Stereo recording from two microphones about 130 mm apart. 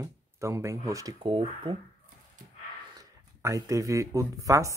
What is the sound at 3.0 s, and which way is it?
Speech, 25° right (ahead or behind).